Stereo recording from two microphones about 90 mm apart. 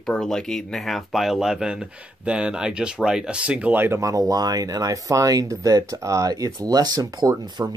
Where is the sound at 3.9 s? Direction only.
35° right (ahead or behind).